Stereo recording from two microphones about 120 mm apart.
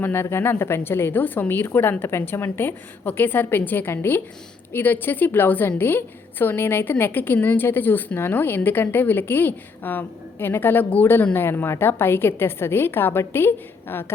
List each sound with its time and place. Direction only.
0.0 s a woman's voice: 20° left (ahead or behind)